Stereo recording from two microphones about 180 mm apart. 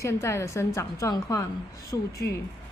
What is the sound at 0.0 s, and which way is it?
A woman's voice, 15° left (ahead or behind).